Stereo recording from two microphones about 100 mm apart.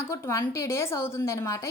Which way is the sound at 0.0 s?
30° left (ahead or behind).